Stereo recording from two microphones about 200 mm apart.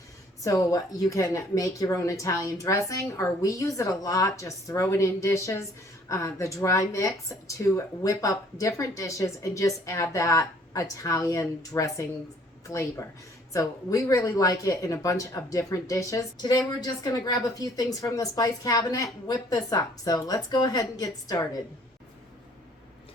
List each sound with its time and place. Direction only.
0.4 s speech: 15° left (ahead or behind)